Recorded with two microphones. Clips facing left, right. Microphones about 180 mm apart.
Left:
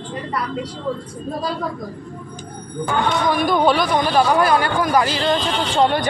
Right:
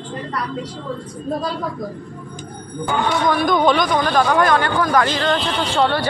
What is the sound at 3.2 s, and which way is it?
Speech, 5° left (ahead or behind).